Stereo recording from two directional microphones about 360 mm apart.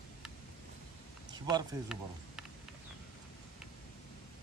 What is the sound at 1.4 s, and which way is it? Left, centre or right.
Speech, centre.